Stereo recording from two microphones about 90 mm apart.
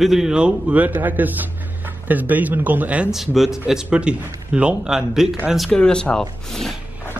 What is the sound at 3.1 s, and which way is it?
A man's voice, 5° right (ahead or behind).